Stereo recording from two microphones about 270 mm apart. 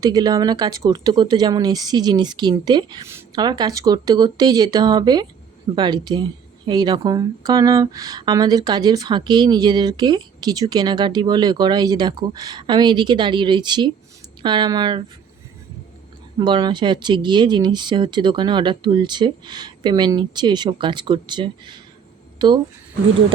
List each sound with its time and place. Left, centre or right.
0.0 s speech: centre
16.4 s speech: centre